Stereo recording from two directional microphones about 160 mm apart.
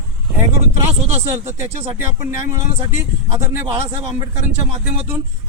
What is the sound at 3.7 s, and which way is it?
Speech, 40° right (ahead or behind).